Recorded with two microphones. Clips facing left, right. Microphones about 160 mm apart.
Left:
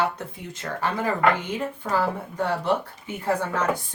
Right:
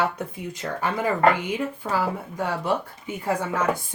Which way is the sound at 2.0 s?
10° right (ahead or behind).